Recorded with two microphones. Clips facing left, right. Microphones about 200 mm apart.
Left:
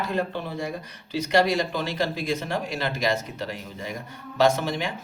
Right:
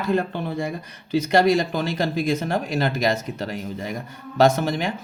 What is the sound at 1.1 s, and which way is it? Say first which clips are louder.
Speech: right 4 dB; 45° right (ahead or behind).